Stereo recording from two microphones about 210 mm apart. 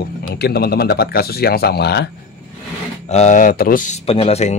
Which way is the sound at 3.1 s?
35° left (ahead or behind).